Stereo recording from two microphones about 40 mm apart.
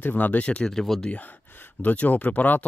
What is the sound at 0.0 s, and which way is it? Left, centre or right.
Speech, left.